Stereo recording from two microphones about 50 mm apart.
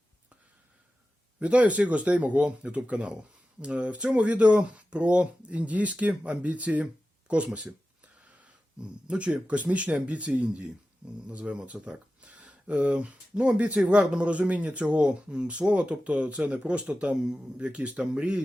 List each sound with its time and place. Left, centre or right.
1.4 s speech: right
8.8 s speech: right